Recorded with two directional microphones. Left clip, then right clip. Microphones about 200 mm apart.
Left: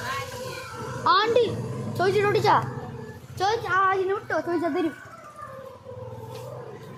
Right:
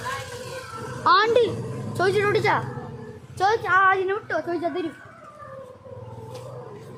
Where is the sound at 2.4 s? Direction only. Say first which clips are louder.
Left 2 dB; 10° left (ahead or behind).